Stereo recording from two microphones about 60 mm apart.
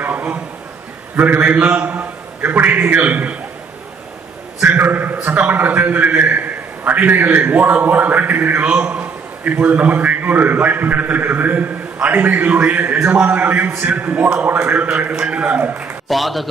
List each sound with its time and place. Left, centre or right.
0.0 s a sound: right
1.1 s a man's voice: right
4.6 s a man's voice: right
16.1 s a man's voice: centre